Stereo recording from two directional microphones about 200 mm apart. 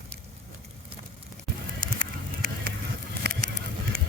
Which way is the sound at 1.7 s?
45° right (ahead or behind).